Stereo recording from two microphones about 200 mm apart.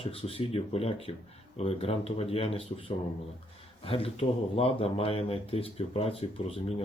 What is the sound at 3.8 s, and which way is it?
Speech, 30° left (ahead or behind).